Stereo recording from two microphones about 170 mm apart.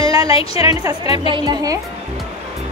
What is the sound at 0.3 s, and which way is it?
A woman's voice, 35° left (ahead or behind).